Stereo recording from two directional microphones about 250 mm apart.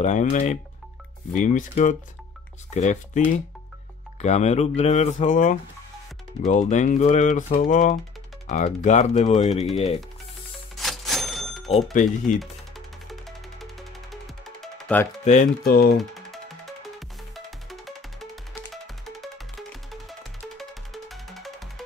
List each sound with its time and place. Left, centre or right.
0.0 s speech: left
4.2 s speech: left
10.8 s cash register: centre
11.9 s speech: left
14.4 s music: centre
15.2 s speech: left
16.0 s music: centre